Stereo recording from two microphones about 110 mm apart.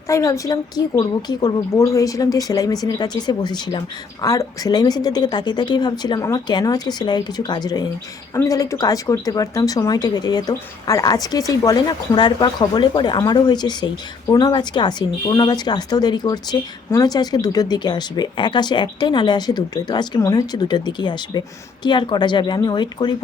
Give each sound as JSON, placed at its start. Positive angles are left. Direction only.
{"t": 0.1, "sound": "speech", "side_deg": 30}